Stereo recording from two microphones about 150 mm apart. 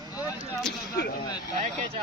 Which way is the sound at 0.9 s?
90° left.